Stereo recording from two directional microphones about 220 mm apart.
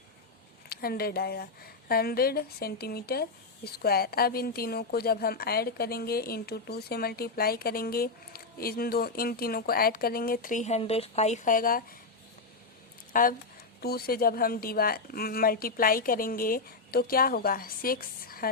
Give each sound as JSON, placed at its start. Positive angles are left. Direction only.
{"t": 0.7, "sound": "speech", "side_deg": 45}
{"t": 13.1, "sound": "speech", "side_deg": 40}